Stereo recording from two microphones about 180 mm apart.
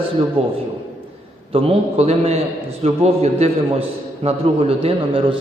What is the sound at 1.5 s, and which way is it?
A man's voice, 35° right (ahead or behind).